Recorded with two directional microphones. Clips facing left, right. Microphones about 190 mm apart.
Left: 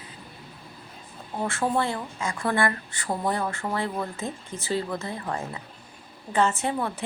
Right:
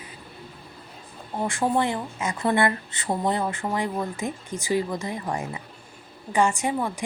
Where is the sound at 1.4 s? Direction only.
15° right (ahead or behind).